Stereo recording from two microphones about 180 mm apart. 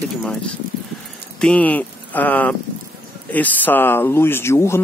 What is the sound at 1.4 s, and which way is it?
Speech, 5° left (ahead or behind).